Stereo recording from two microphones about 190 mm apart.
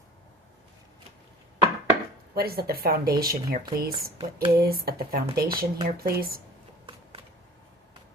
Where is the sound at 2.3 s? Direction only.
55° right (ahead or behind).